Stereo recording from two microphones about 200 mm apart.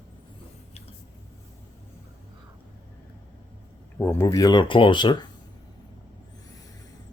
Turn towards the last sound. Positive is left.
turn(degrees=25)  # may be behind; listen again after turning